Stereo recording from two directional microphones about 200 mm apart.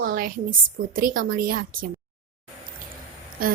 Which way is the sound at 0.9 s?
45° right (ahead or behind).